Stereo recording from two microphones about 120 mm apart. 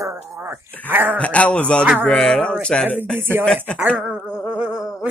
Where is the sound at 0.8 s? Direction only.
15° right (ahead or behind).